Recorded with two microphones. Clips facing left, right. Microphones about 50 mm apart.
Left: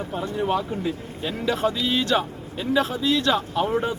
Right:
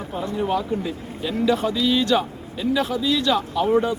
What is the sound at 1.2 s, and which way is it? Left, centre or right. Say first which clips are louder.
A man's voice: right 3 dB; centre.